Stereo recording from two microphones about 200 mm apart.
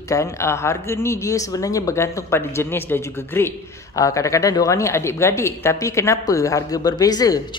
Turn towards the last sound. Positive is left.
turn(degrees=20)  # may be behind; listen again after turning